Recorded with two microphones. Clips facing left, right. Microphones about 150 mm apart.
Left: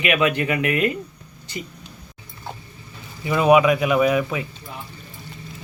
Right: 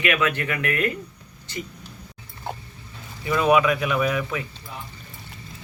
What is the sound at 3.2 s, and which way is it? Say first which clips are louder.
Speech: left 4 dB; 20° left (ahead or behind).